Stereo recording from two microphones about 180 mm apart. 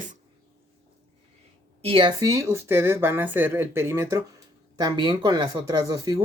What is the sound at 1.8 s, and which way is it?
Speech, 30° right (ahead or behind).